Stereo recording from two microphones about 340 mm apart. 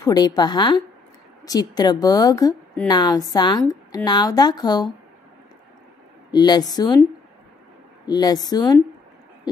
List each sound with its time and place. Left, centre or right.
0.0 s a woman's voice: centre
6.3 s a woman's voice: centre
8.1 s a woman's voice: centre